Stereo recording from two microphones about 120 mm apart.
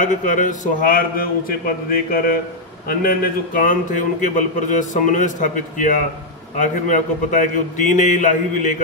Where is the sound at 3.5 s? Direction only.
90° left.